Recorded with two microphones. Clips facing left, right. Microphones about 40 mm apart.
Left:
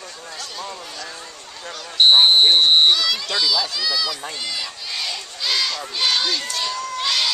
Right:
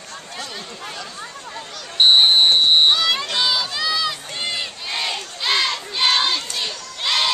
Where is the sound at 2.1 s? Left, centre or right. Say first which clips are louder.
Left 1 dB; centre.